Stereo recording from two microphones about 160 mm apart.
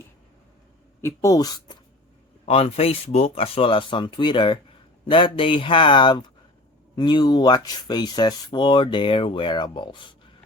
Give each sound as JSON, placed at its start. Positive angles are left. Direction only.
{"t": 1.0, "sound": "speech", "side_deg": 20}
{"t": 2.5, "sound": "speech", "side_deg": 40}